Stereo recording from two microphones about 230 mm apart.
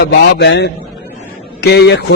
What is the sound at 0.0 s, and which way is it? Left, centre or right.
A man's voice, left.